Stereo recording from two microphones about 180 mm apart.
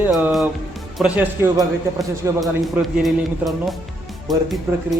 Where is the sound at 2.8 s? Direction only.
Centre (ahead or behind).